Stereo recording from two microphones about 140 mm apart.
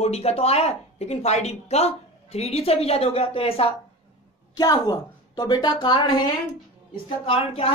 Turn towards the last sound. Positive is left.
turn(degrees=40)  # may be behind; listen again after turning